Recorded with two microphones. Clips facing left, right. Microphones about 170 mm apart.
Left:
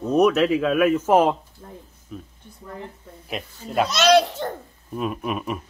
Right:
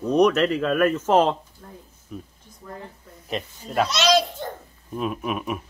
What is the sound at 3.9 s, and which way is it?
Speech, 50° left (ahead or behind).